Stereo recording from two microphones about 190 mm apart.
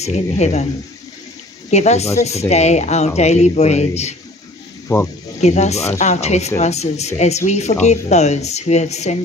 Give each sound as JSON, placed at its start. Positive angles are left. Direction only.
{"t": 0.0, "sound": "speech", "side_deg": 35}
{"t": 1.7, "sound": "speech", "side_deg": 35}
{"t": 4.9, "sound": "speech", "side_deg": 15}
{"t": 5.4, "sound": "speech", "side_deg": 35}